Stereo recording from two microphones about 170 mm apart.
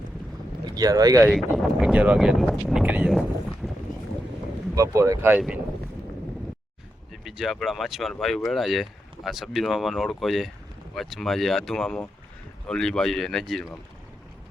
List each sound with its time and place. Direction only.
0.6 s speech: 25° right (ahead or behind)
1.3 s speech: 5° right (ahead or behind)
4.7 s speech: 20° right (ahead or behind)
7.1 s speech: centre (ahead or behind)